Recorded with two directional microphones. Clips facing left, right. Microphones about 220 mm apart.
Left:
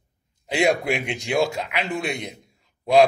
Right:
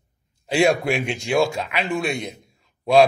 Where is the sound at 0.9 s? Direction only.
20° left (ahead or behind).